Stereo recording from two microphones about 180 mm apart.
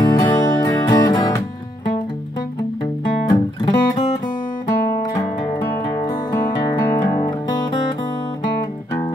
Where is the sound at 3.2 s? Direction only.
20° left (ahead or behind).